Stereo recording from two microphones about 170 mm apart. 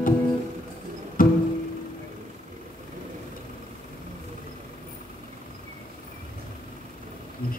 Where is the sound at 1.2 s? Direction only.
55° left (ahead or behind).